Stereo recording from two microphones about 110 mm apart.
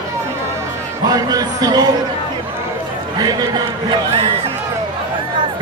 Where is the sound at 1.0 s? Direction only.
35° right (ahead or behind).